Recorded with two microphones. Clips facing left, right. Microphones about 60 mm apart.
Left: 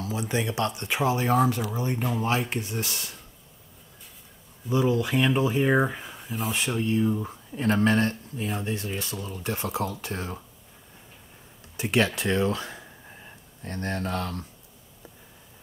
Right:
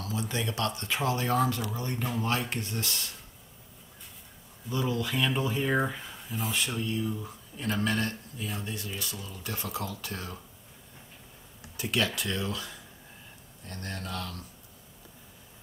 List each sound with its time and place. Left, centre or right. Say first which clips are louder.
0.0 s speech: left 4 dB; centre
4.6 s speech: left 7 dB; centre
6.5 s speech: left 6 dB; left
11.7 s speech: left 5 dB; left